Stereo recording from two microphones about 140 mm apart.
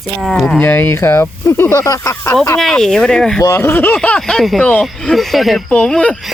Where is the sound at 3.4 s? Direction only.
20° left (ahead or behind); by 6.3 s 5° left (ahead or behind).